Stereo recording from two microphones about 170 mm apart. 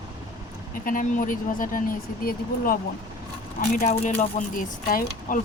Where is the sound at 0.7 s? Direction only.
55° left (ahead or behind).